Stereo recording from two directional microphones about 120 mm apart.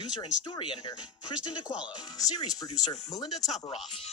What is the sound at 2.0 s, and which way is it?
Speech, 30° left (ahead or behind).